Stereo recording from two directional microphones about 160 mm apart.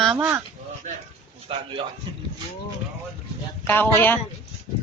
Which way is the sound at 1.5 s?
35° right (ahead or behind).